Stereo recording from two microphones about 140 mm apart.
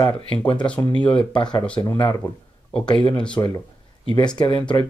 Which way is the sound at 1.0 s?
35° left (ahead or behind).